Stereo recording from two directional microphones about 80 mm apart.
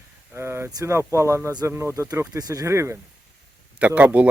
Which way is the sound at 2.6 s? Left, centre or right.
Right.